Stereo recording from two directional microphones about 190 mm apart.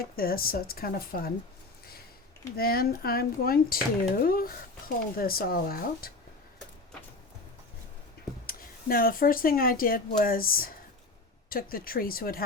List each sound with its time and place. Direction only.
0.0 s speech: 50° left (ahead or behind)
2.6 s speech: 55° left (ahead or behind)
8.4 s speech: 50° left (ahead or behind)